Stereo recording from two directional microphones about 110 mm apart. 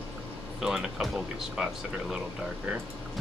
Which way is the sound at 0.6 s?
5° right (ahead or behind).